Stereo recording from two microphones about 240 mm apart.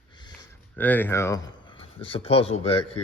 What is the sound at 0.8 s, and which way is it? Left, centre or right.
Speech, centre.